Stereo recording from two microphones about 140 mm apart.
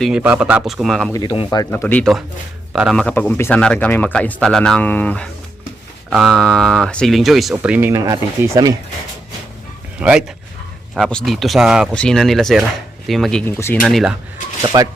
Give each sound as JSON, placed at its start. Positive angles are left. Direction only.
{"t": 0.0, "sound": "speech", "side_deg": -10}
{"t": 1.7, "sound": "speech", "side_deg": 10}
{"t": 6.1, "sound": "speech", "side_deg": 0}
{"t": 7.5, "sound": "speech", "side_deg": -15}
{"t": 10.0, "sound": "speech", "side_deg": -5}
{"t": 13.4, "sound": "speech", "side_deg": 15}
{"t": 13.8, "sound": "speech", "side_deg": 0}
{"t": 14.7, "sound": "speech", "side_deg": -30}